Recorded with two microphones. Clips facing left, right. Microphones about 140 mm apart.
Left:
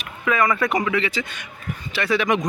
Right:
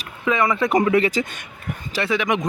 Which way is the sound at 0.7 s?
40° right (ahead or behind).